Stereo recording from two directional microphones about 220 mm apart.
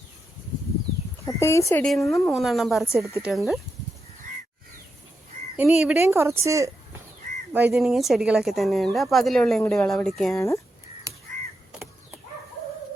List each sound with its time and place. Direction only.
1.2 s speech: 15° left (ahead or behind)
5.5 s speech: 5° right (ahead or behind)
10.3 s speech: 15° left (ahead or behind)
11.1 s crow: 15° right (ahead or behind)